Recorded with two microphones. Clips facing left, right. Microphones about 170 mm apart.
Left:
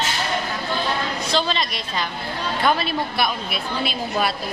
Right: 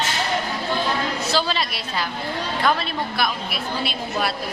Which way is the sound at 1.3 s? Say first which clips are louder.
Left 2 dB; 5° right (ahead or behind).